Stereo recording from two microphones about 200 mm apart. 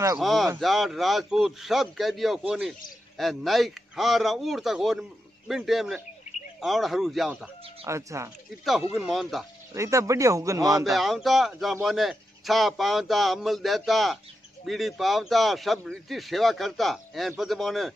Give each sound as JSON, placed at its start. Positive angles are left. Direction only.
{"t": 0.2, "sound": "speech", "side_deg": 0}
{"t": 7.8, "sound": "speech", "side_deg": -15}
{"t": 8.9, "sound": "speech", "side_deg": 0}
{"t": 9.8, "sound": "speech", "side_deg": -15}
{"t": 10.8, "sound": "speech", "side_deg": 0}